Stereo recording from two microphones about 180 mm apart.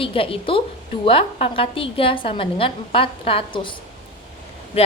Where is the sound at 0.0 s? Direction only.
30° left (ahead or behind).